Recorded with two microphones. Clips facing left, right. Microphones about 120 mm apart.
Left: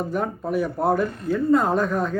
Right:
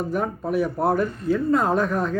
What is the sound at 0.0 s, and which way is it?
Speech, centre (ahead or behind).